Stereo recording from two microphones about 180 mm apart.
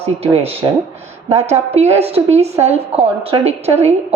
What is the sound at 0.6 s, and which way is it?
Speech, 15° right (ahead or behind).